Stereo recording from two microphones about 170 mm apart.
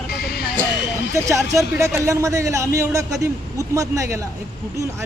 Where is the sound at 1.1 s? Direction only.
20° right (ahead or behind).